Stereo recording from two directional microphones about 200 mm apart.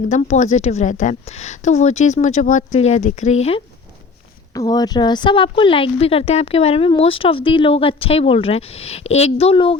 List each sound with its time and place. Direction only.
0.1 s a woman's voice: 35° left (ahead or behind)
4.5 s a woman's voice: 20° left (ahead or behind)